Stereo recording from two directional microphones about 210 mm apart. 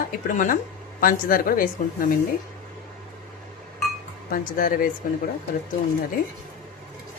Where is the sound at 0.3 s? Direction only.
40° left (ahead or behind).